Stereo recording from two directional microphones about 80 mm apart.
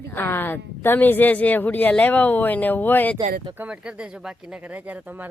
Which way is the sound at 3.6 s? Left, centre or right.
Centre.